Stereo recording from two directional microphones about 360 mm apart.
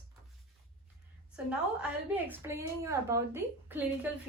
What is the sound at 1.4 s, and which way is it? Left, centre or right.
A woman's voice, centre.